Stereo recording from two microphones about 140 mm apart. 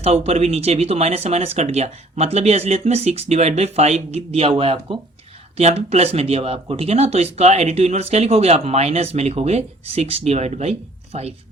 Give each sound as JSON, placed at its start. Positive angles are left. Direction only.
{"t": 0.0, "sound": "speech", "side_deg": -50}